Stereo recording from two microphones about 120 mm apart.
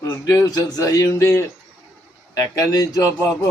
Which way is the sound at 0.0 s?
30° left (ahead or behind).